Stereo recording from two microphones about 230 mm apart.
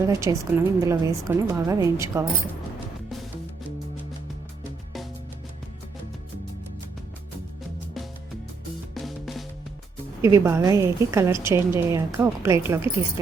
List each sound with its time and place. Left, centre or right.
0.0 s a woman's voice: centre
9.0 s music: centre
10.2 s a woman's voice: centre